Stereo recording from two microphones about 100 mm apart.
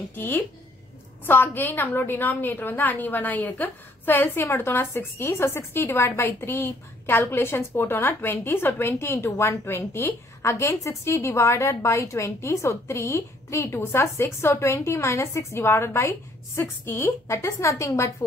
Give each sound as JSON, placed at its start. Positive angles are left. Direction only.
{"t": 0.1, "sound": "a woman's voice", "side_deg": 20}